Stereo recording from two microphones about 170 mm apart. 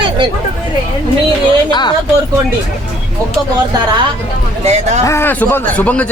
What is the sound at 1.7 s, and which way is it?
Speech, 25° left (ahead or behind).